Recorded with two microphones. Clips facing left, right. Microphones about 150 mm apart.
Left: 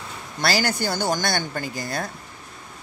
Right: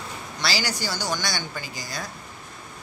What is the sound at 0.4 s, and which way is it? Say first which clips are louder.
Speech: left 5 dB; 55° left (ahead or behind).